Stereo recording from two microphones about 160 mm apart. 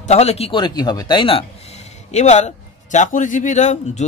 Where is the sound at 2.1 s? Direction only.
45° left (ahead or behind).